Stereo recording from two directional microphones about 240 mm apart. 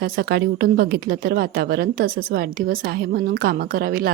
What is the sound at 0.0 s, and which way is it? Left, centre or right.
A woman's voice, right.